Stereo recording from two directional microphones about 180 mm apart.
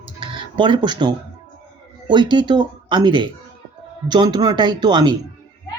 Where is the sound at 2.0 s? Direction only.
25° right (ahead or behind).